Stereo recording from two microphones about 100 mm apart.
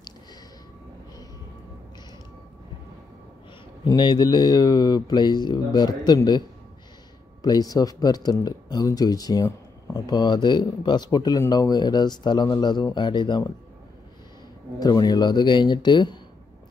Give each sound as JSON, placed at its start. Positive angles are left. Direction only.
{"t": 3.8, "sound": "speech", "side_deg": 45}
{"t": 7.4, "sound": "speech", "side_deg": 40}
{"t": 14.8, "sound": "speech", "side_deg": 40}